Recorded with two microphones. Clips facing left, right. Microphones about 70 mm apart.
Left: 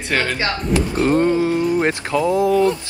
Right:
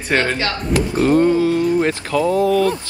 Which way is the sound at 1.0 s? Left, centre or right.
Centre.